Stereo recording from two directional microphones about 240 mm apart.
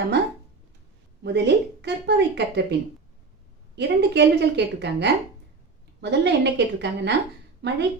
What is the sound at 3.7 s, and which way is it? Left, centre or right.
A woman's voice, right.